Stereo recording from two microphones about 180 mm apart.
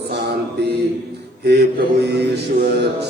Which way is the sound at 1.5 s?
65° right (ahead or behind).